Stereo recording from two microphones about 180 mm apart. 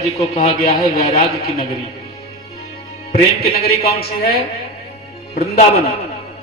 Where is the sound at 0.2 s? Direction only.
35° left (ahead or behind).